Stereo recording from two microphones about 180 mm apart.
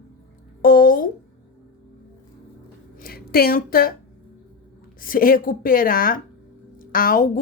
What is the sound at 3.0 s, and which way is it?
Speech, 55° left (ahead or behind).